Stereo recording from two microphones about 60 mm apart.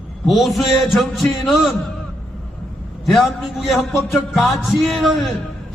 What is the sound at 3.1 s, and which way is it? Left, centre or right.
A man's voice, centre.